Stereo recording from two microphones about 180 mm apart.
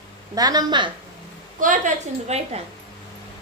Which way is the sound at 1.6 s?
45° right (ahead or behind).